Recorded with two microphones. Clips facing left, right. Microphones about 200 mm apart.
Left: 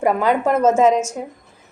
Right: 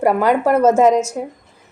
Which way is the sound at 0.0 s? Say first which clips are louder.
Right 2 dB; 10° right (ahead or behind).